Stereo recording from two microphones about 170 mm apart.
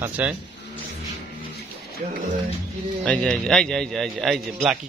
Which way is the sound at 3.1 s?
5° left (ahead or behind).